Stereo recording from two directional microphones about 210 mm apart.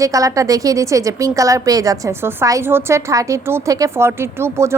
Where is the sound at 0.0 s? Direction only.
15° right (ahead or behind).